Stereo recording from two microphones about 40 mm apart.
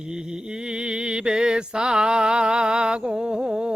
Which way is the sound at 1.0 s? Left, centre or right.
Right.